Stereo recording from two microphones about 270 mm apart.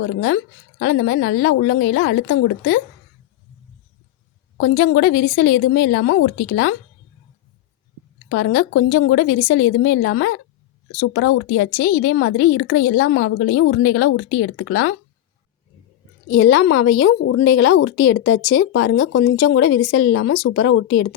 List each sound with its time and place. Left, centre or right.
0.0 s a woman's voice: left
4.6 s a woman's voice: left
8.3 s a woman's voice: left
16.3 s a woman's voice: left